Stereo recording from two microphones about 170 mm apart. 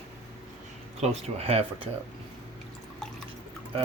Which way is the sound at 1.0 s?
40° right (ahead or behind).